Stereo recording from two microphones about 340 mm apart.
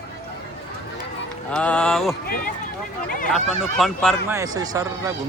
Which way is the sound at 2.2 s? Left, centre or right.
Left.